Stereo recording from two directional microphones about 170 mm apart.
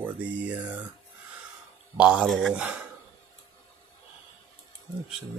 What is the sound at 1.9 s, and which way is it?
Speech, 5° right (ahead or behind).